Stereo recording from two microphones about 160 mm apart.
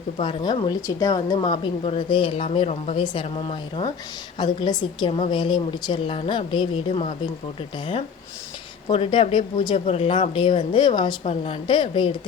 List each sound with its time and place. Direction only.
0.2 s speech: 30° left (ahead or behind)
3.0 s a woman's voice: 30° left (ahead or behind)
8.9 s speech: 35° left (ahead or behind)